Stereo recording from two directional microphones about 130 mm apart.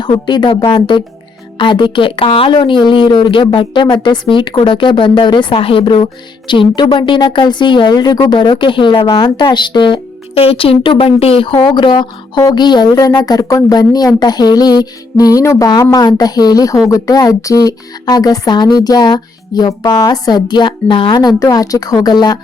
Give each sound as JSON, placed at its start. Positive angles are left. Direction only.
{"t": 0.0, "sound": "a woman's voice", "side_deg": 35}